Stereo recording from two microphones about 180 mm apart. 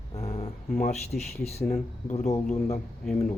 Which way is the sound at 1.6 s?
40° left (ahead or behind).